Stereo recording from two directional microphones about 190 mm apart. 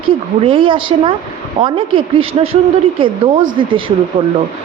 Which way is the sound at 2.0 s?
30° right (ahead or behind).